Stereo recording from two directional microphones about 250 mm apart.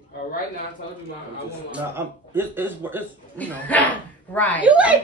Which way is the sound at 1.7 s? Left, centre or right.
Centre.